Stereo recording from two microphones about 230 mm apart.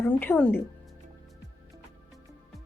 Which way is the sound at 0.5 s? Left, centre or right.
Centre.